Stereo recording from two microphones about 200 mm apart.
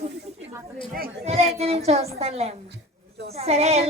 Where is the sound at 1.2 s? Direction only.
30° right (ahead or behind).